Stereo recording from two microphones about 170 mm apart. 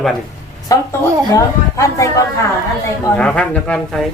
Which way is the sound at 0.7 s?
20° left (ahead or behind).